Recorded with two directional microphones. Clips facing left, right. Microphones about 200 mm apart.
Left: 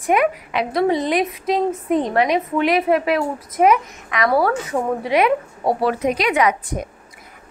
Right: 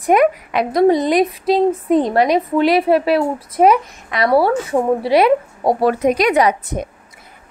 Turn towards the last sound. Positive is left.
turn(degrees=-35)  # may be behind; listen again after turning